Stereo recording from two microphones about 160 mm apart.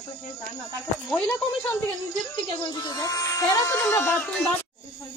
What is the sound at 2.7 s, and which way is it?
Speech, 25° left (ahead or behind).